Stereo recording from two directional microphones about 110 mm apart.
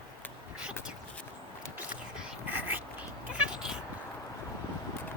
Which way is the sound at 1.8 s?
10° right (ahead or behind).